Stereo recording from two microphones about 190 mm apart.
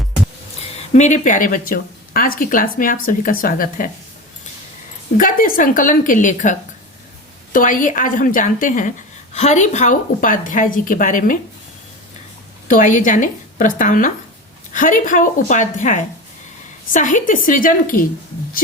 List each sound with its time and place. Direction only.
0.9 s speech: 40° left (ahead or behind)
5.1 s speech: 45° left (ahead or behind)
12.6 s speech: 45° left (ahead or behind)